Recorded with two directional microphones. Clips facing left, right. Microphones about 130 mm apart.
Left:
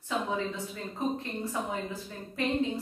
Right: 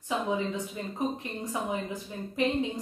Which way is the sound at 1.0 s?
15° right (ahead or behind).